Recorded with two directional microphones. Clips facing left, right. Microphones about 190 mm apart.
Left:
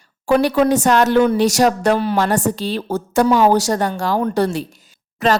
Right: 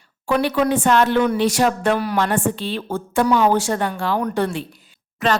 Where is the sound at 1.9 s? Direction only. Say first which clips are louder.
Left 3 dB; 25° left (ahead or behind).